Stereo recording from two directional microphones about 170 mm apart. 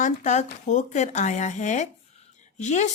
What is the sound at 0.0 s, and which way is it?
Speech, 45° left (ahead or behind).